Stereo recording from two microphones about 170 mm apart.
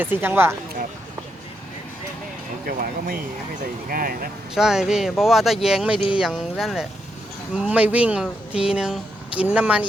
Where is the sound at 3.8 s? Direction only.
60° right (ahead or behind).